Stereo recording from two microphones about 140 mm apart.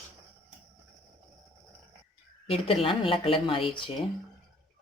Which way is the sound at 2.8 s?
40° left (ahead or behind).